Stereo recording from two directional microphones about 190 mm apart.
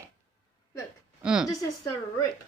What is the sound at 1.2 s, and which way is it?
Speech, 5° right (ahead or behind).